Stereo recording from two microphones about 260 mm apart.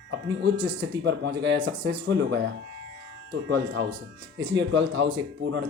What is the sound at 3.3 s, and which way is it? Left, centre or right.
Speech, right.